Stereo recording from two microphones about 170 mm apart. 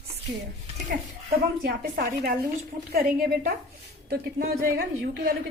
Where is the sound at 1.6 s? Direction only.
65° right (ahead or behind).